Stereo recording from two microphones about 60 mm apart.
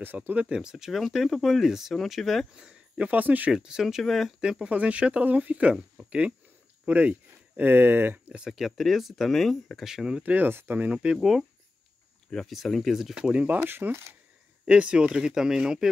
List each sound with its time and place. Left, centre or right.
0.0 s speech: right
0.5 s speech: centre
2.5 s speech: centre
3.1 s speech: right
3.5 s speech: centre
4.4 s speech: centre; by 8.2 s right
8.5 s speech: centre
9.8 s speech: centre
10.2 s speech: right
10.9 s speech: centre
11.1 s speech: centre
12.3 s speech: centre
13.6 s speech: right
14.7 s speech: centre